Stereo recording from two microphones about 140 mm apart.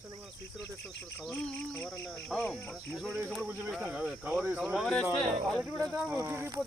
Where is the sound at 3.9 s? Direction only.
5° right (ahead or behind).